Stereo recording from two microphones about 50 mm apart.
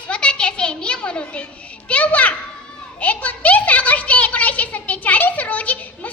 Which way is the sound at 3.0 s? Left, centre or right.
Left.